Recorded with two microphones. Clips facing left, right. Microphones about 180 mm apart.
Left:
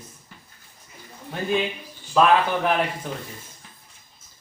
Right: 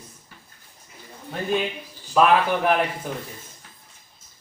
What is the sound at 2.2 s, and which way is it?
Speech, 5° right (ahead or behind).